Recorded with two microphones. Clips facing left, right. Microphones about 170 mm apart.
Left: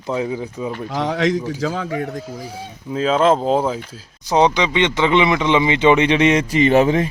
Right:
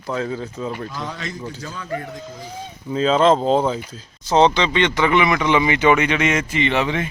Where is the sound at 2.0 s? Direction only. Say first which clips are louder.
Left 6 dB; 60° left (ahead or behind).